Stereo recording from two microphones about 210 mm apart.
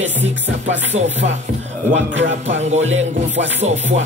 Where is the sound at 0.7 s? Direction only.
35° right (ahead or behind).